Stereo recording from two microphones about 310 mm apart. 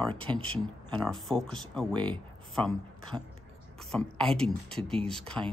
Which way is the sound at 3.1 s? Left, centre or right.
Centre.